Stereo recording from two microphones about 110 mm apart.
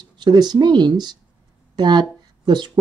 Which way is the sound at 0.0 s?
40° right (ahead or behind).